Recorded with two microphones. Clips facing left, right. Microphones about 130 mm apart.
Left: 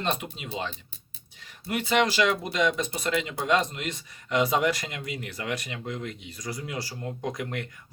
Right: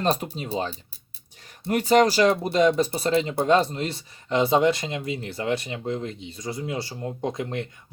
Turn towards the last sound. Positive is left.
turn(degrees=-25)  # may be behind; listen again after turning